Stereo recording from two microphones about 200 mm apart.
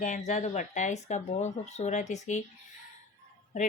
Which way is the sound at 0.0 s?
40° left (ahead or behind).